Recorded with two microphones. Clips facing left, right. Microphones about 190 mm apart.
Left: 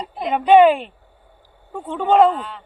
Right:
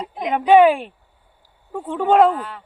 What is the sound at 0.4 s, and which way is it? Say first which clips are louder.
Speech: left 1 dB; 5° right (ahead or behind).